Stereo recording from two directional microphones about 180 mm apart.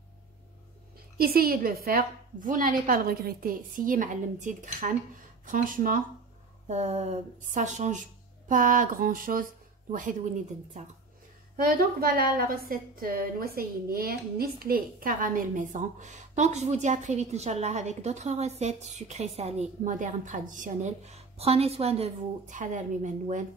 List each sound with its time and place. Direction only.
1.1 s a woman's voice: 55° right (ahead or behind)
6.7 s a sound: 40° right (ahead or behind)
8.5 s a woman's voice: 45° right (ahead or behind)
11.6 s a woman's voice: 60° right (ahead or behind)